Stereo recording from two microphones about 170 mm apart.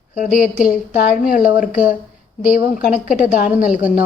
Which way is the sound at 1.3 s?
50° left (ahead or behind).